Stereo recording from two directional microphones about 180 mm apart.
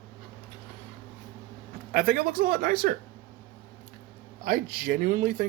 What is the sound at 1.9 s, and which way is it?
Speech, 50° right (ahead or behind).